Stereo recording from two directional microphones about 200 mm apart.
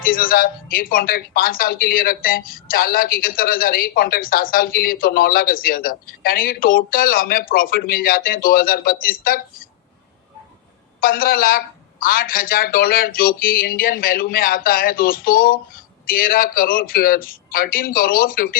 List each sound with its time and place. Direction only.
0.0 s speech: 45° left (ahead or behind)
11.0 s speech: 45° left (ahead or behind)